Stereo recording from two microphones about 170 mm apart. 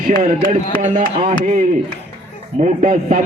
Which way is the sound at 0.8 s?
45° right (ahead or behind).